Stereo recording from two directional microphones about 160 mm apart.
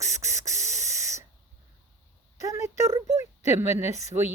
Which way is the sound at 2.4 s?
20° right (ahead or behind).